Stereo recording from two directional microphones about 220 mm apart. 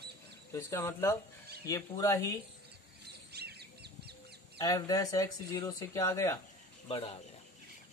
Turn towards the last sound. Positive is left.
turn(degrees=25)  # may be behind; listen again after turning